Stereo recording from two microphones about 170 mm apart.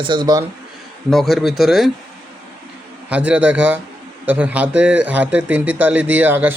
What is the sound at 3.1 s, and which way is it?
A man's voice, 5° right (ahead or behind).